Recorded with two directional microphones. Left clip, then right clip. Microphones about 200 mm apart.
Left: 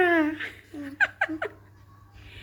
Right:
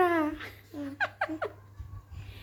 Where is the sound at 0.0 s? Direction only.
5° right (ahead or behind).